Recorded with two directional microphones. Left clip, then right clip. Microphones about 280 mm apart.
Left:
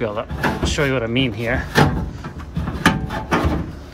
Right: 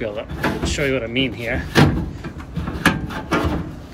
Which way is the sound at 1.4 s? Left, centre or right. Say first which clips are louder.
Left 2 dB; left.